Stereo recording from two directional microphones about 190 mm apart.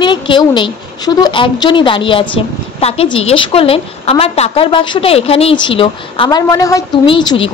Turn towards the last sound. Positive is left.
turn(degrees=25)  # may be behind; listen again after turning